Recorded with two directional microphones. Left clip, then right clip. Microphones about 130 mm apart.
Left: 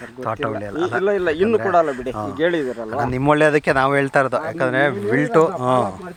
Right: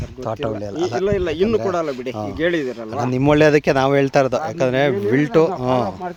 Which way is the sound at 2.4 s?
50° right (ahead or behind).